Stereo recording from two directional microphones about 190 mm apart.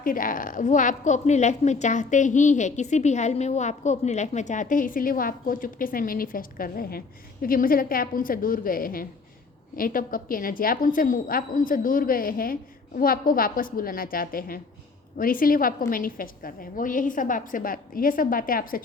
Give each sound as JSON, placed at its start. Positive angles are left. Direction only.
{"t": 0.0, "sound": "a woman's voice", "side_deg": 45}